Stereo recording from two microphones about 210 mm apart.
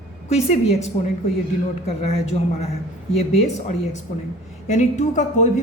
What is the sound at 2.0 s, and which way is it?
A man's voice, 30° left (ahead or behind).